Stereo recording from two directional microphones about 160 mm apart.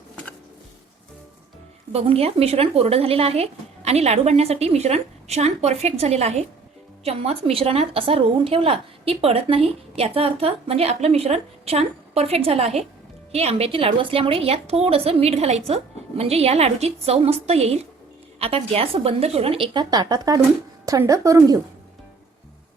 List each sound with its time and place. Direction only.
1.9 s a woman's voice: 40° right (ahead or behind); by 21.6 s 20° right (ahead or behind)